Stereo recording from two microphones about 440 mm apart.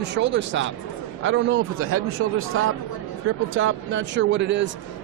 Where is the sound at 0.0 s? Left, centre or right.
Right.